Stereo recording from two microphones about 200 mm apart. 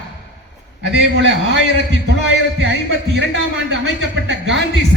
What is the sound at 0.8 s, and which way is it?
Speech, 60° right (ahead or behind).